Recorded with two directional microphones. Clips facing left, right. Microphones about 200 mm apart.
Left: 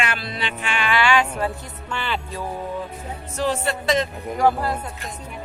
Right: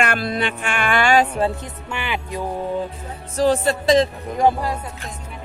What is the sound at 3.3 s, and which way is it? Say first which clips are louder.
Speech: right 6 dB; 35° right (ahead or behind).